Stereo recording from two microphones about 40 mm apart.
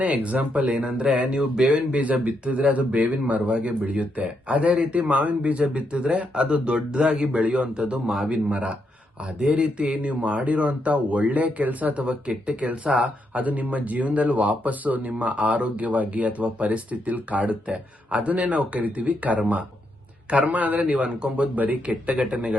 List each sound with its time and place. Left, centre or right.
0.0 s speech: right
0.7 s speech: right
1.4 s speech: centre
1.7 s speech: right
8.0 s speech: centre
8.3 s speech: right
9.7 s speech: right
12.0 s speech: right
13.4 s speech: right
21.8 s speech: right